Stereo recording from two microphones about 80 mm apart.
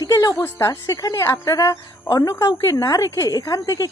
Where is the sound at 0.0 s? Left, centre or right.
Left.